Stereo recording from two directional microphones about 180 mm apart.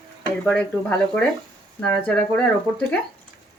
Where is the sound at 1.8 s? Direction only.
10° left (ahead or behind).